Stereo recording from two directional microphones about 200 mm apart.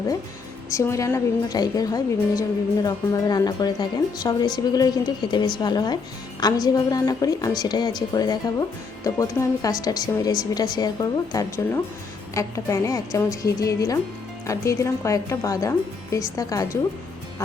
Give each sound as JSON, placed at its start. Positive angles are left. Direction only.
{"t": 0.7, "sound": "a woman's voice", "side_deg": 15}